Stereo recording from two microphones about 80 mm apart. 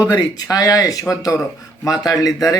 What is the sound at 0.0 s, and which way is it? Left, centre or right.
Speech, left.